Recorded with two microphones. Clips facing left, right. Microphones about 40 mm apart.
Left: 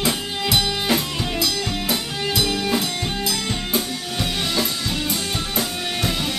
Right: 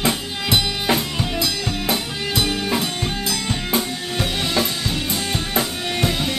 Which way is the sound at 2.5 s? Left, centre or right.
Centre.